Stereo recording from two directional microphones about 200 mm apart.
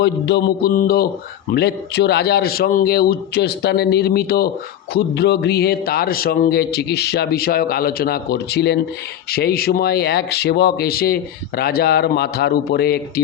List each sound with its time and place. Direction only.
0.0 s speech: 60° left (ahead or behind)